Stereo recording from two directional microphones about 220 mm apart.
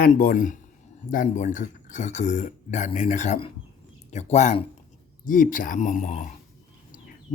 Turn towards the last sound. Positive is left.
turn(degrees=35)  # may be behind; listen again after turning